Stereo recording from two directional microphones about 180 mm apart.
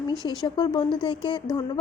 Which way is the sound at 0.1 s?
20° left (ahead or behind).